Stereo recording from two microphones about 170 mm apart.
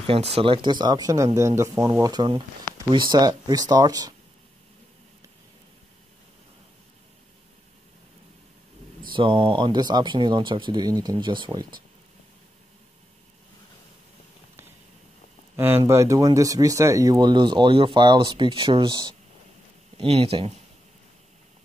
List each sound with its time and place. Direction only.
0.0 s speech: 35° right (ahead or behind)
9.1 s speech: 30° right (ahead or behind)
15.5 s speech: 15° right (ahead or behind); by 20.5 s 35° right (ahead or behind)